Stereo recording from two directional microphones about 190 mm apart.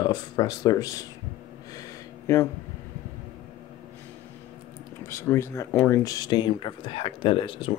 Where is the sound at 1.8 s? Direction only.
15° left (ahead or behind).